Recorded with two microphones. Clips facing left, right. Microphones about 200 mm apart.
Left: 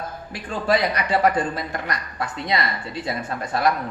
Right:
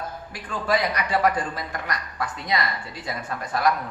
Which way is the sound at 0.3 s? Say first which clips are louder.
Left 3 dB; 25° left (ahead or behind).